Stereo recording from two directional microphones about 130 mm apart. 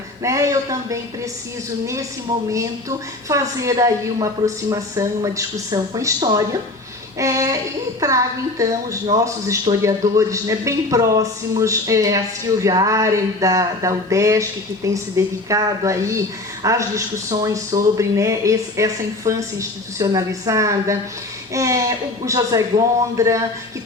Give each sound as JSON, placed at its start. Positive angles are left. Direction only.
{"t": 0.2, "sound": "speech", "side_deg": -25}
{"t": 2.3, "sound": "speech", "side_deg": -30}